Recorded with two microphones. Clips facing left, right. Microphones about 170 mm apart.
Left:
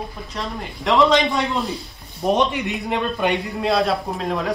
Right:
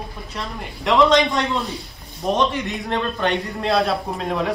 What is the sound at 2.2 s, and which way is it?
Speech, 15° left (ahead or behind).